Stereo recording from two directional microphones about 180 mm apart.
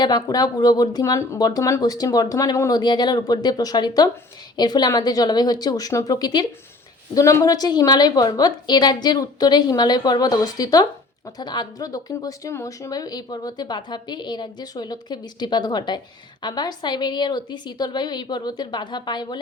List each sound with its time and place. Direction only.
0.0 s speech: 20° left (ahead or behind)